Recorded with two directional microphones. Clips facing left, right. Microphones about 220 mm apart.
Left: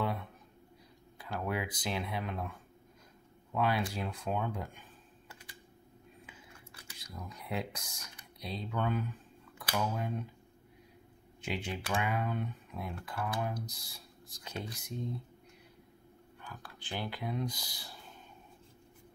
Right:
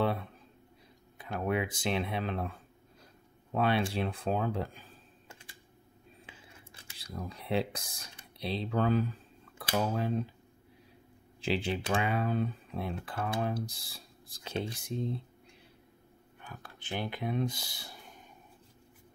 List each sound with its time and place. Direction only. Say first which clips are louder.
0.0 s a sound: right 5 dB; 30° right (ahead or behind)
1.1 s speech: right 4 dB; 20° right (ahead or behind)
3.5 s speech: right 3 dB; 25° right (ahead or behind)
5.3 s typing: even; 25° right (ahead or behind)
6.2 s a sound: even; 25° right (ahead or behind)
9.6 s speech: right 4 dB; 30° right (ahead or behind)
11.4 s speech: right 6 dB; 30° right (ahead or behind)
16.3 s speech: right 1 dB; 20° right (ahead or behind)